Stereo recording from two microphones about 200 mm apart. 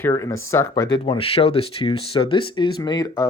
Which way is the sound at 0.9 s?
25° left (ahead or behind).